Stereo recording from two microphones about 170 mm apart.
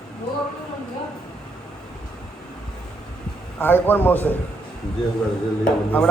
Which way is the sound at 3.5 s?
10° left (ahead or behind).